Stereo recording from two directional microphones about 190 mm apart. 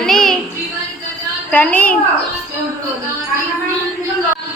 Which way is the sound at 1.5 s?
10° left (ahead or behind).